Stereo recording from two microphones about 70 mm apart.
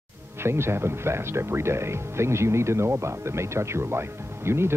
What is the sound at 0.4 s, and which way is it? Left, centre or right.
Speech, right.